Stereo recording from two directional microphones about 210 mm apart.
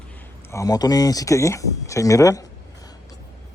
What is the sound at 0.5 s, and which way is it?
Speech, 15° left (ahead or behind).